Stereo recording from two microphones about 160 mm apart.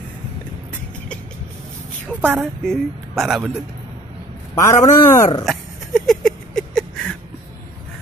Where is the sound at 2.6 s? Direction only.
Centre (ahead or behind).